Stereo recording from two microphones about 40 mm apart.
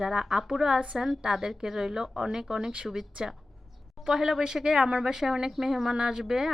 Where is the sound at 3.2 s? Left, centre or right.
Right.